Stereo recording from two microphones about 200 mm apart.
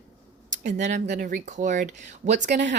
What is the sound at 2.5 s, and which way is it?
Speech, 60° right (ahead or behind).